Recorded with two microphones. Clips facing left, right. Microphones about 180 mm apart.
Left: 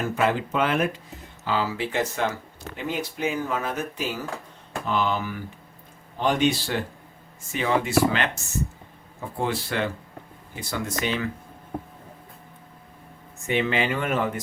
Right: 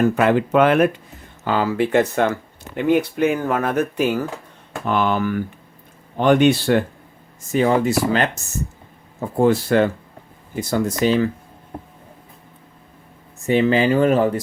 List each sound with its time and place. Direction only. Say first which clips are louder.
0.0 s speech: right 8 dB; 60° right (ahead or behind)
7.5 s speech: right 6 dB; 40° right (ahead or behind)
9.4 s speech: right 11 dB; 45° right (ahead or behind)
13.5 s speech: right 8 dB; 35° right (ahead or behind)